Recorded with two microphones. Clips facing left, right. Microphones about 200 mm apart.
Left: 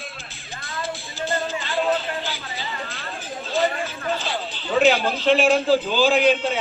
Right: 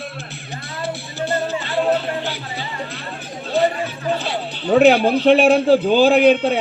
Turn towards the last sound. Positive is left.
turn(degrees=-60)  # may be behind; listen again after turning